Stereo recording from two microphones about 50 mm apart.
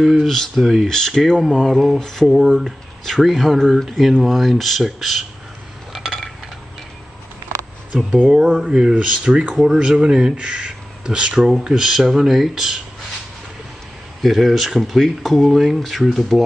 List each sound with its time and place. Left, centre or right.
0.0 s speech: centre
5.9 s a sound: centre
7.9 s speech: right
8.3 s speech: centre
14.2 s speech: centre